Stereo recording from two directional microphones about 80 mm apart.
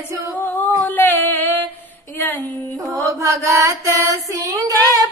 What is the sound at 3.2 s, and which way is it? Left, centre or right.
Female singing, right.